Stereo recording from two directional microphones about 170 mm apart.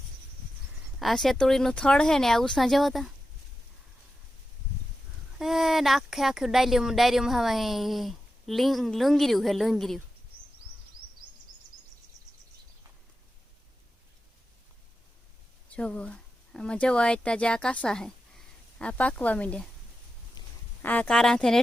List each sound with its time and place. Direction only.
0.9 s speech: centre (ahead or behind)
5.4 s speech: centre (ahead or behind)
15.7 s speech: 5° left (ahead or behind)
20.4 s duck: 25° left (ahead or behind)
20.8 s speech: 10° left (ahead or behind)